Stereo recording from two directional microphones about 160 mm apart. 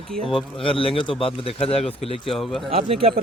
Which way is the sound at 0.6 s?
35° left (ahead or behind).